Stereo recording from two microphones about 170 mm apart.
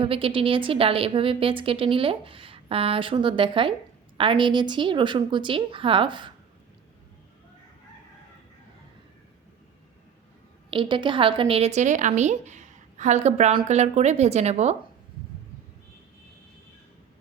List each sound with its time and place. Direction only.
0.0 s a woman's voice: 30° right (ahead or behind)
10.7 s a woman's voice: 30° right (ahead or behind)